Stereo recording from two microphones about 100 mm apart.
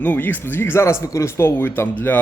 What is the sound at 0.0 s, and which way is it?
Speech, 15° left (ahead or behind).